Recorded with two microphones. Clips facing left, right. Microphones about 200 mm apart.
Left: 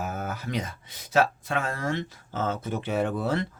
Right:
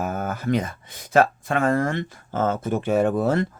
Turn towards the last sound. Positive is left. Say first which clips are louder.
# right 6 dB
turn(degrees=-50)  # may be behind; listen again after turning